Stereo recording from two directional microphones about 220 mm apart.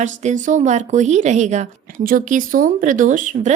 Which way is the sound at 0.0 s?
35° right (ahead or behind).